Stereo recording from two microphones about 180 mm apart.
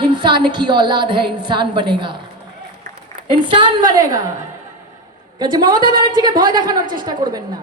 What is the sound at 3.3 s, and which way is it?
Speech, 25° right (ahead or behind).